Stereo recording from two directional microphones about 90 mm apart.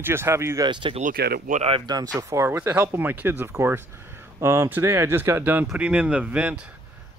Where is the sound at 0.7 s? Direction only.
65° right (ahead or behind).